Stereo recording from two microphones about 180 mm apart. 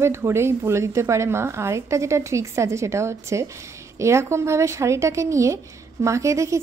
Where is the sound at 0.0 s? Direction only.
15° right (ahead or behind).